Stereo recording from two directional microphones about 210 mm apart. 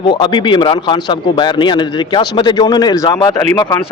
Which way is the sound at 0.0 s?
20° left (ahead or behind).